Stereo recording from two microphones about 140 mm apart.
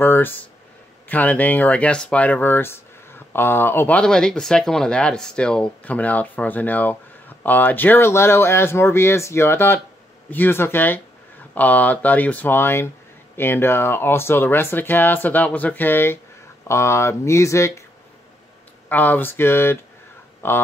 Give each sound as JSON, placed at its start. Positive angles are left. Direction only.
{"t": 0.0, "sound": "speech", "side_deg": 15}
{"t": 18.9, "sound": "speech", "side_deg": 10}